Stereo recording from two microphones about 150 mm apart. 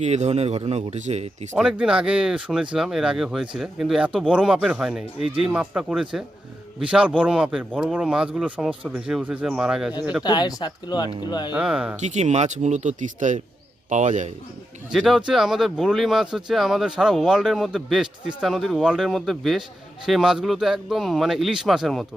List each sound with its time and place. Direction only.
0.0 s speech: 50° right (ahead or behind)
1.5 s speech: 5° right (ahead or behind)
10.2 s speech: 25° left (ahead or behind)
11.5 s speech: 5° right (ahead or behind)
11.9 s speech: 50° right (ahead or behind)
14.9 s speech: centre (ahead or behind)